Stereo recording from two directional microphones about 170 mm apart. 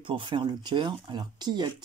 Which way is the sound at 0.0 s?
30° right (ahead or behind).